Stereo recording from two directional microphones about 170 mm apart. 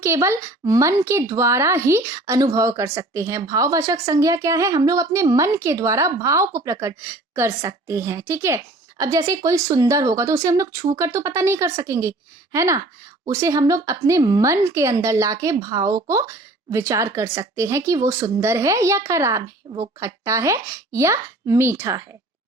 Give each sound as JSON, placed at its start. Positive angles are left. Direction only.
{"t": 0.0, "sound": "a woman's voice", "side_deg": -15}